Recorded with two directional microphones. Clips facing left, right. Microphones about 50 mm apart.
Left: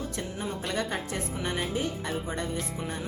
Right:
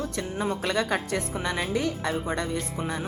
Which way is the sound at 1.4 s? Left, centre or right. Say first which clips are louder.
Right 2 dB; right.